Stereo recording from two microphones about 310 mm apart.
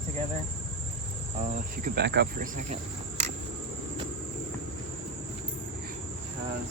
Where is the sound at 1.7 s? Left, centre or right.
Right.